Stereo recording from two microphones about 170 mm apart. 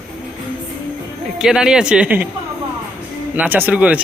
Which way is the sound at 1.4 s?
5° right (ahead or behind).